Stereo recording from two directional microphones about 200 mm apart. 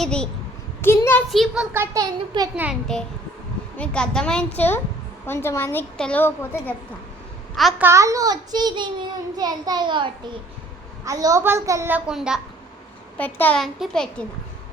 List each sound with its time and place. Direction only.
0.0 s a sound: 5° left (ahead or behind)
1.3 s a child's voice: centre (ahead or behind)
1.7 s a woman's voice: 15° right (ahead or behind)
2.6 s a child's voice: centre (ahead or behind)
7.5 s a child's voice: centre (ahead or behind)
7.9 s a child's voice: 15° right (ahead or behind)
13.1 s a child's voice: 10° left (ahead or behind)